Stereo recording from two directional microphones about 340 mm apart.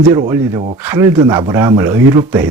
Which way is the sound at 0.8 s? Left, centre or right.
Centre.